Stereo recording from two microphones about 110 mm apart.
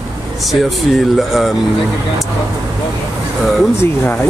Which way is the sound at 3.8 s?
20° left (ahead or behind).